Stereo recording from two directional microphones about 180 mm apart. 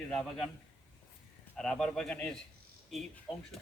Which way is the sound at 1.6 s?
5° left (ahead or behind).